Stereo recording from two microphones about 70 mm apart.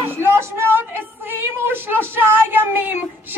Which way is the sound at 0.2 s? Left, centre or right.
Right.